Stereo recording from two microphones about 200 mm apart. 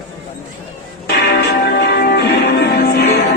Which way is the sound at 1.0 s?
55° left (ahead or behind).